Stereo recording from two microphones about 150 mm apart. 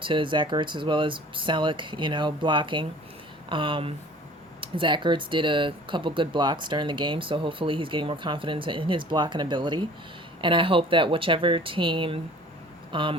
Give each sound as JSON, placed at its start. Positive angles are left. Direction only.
{"t": 0.0, "sound": "a man's voice", "side_deg": -35}